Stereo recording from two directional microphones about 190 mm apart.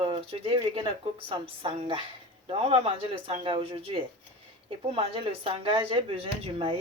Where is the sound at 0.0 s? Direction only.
25° right (ahead or behind).